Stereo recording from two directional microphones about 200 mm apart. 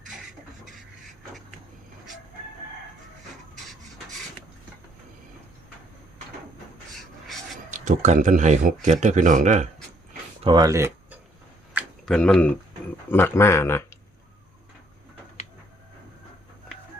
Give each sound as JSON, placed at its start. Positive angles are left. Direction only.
{"t": 6.9, "sound": "filing", "side_deg": 0}
{"t": 7.7, "sound": "speech", "side_deg": -40}
{"t": 10.4, "sound": "a sound", "side_deg": -20}
{"t": 12.0, "sound": "speech", "side_deg": 5}